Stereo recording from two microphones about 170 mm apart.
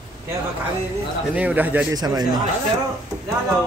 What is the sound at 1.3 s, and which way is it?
Speech, 10° right (ahead or behind).